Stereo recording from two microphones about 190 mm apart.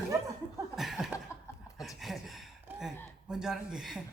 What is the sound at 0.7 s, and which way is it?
Speech, centre (ahead or behind).